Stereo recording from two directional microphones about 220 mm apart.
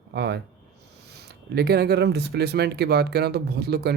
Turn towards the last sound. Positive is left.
turn(degrees=-45)  # may be behind; listen again after turning